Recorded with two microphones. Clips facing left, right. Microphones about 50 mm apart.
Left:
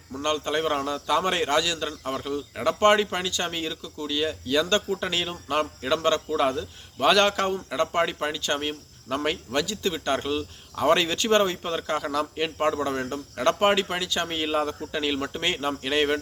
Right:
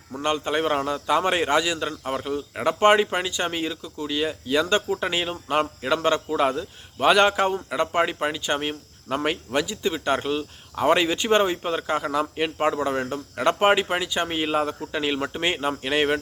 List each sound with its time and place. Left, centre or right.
0.1 s a man's voice: centre